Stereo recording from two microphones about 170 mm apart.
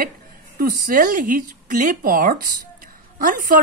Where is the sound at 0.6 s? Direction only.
60° right (ahead or behind).